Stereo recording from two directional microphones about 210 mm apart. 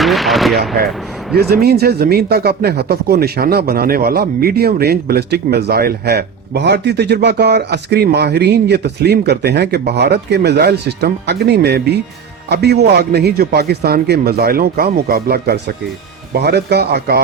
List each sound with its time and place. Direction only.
0.0 s speech: centre (ahead or behind)
1.4 s a man's voice: 50° right (ahead or behind)